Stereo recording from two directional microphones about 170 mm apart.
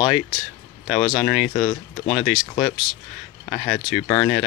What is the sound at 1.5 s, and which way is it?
Speech, 40° left (ahead or behind).